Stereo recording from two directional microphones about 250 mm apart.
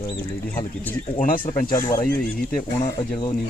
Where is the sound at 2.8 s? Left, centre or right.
Centre.